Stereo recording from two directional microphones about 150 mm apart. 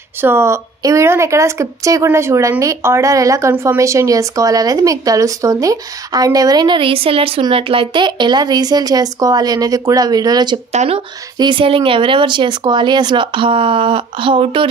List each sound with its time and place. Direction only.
0.2 s a woman's voice: 15° right (ahead or behind)
10.7 s speech: 50° right (ahead or behind)
11.3 s speech: 30° right (ahead or behind)